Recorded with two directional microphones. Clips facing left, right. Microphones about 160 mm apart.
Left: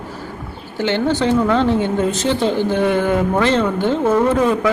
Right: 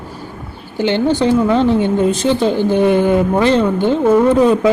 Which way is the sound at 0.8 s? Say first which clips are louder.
Right 3 dB; 15° right (ahead or behind).